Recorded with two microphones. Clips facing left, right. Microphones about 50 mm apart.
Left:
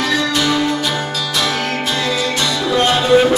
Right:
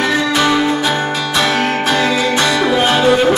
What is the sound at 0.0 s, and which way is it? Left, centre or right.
Music, right.